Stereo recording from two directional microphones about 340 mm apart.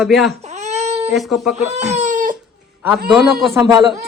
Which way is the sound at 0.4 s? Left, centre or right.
Centre.